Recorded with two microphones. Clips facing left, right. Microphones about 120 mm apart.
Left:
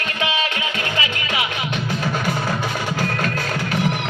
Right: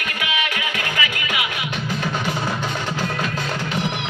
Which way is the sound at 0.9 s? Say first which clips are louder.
Left 1 dB; 30° left (ahead or behind).